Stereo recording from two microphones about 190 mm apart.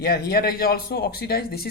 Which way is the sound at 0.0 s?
55° left (ahead or behind).